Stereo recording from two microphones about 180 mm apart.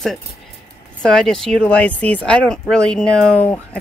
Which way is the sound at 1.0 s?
5° left (ahead or behind).